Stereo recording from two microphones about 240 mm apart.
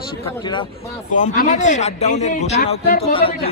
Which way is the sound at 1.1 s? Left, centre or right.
Left.